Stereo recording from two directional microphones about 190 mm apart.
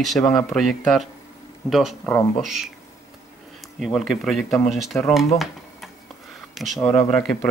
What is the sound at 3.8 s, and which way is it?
Speech, centre (ahead or behind).